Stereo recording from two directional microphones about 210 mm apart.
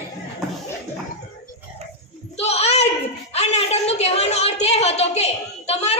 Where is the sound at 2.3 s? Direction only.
30° left (ahead or behind).